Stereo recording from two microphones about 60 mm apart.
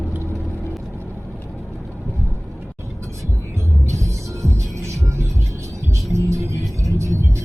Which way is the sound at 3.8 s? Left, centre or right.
Right.